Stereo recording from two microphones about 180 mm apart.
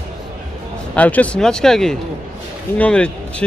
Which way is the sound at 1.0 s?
10° left (ahead or behind).